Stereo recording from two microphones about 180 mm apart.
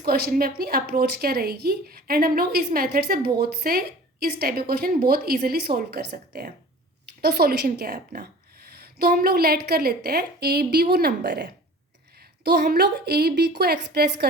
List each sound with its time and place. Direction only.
0.0 s a woman's voice: 60° right (ahead or behind)